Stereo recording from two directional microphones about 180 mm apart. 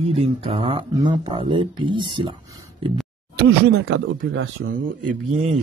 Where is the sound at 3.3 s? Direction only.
65° right (ahead or behind).